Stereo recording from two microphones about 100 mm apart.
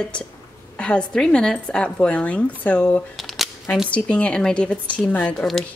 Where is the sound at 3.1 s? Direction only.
Centre (ahead or behind).